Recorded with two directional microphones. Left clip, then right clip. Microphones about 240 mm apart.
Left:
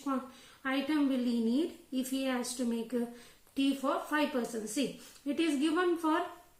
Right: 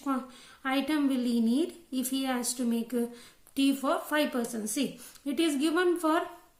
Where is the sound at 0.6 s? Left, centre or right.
Right.